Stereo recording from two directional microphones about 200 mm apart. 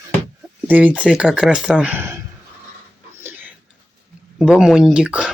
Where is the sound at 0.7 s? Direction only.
10° right (ahead or behind).